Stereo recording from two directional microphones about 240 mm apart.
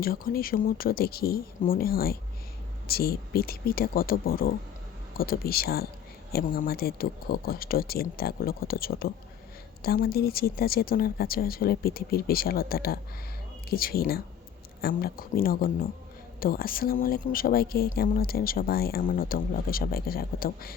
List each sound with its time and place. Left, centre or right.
0.0 s speech: left